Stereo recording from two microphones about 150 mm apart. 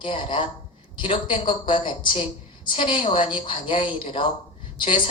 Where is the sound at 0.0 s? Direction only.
35° left (ahead or behind).